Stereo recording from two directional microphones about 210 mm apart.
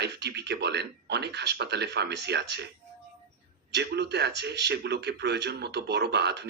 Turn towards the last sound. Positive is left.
turn(degrees=-50)  # may be behind; listen again after turning